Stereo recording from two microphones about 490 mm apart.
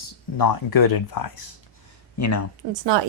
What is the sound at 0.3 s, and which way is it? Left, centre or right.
Speech, left.